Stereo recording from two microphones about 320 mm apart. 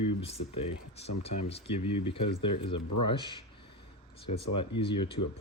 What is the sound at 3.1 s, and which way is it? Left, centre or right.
Speech, centre.